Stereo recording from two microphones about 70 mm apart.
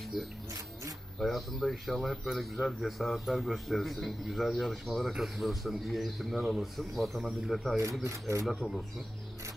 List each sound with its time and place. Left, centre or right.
0.1 s a man's voice: centre
8.0 s speech: right
8.5 s a man's voice: centre